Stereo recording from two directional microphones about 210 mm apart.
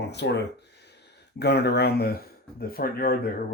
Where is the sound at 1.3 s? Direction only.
50° left (ahead or behind).